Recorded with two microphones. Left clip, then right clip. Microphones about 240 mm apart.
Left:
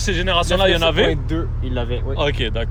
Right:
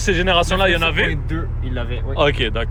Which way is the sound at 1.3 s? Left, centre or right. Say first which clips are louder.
Left 3 dB; left.